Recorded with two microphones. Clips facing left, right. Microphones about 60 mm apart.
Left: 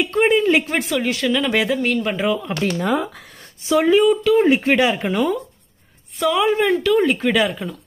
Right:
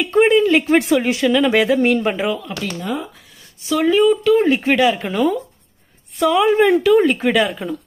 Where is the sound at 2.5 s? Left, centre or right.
Left.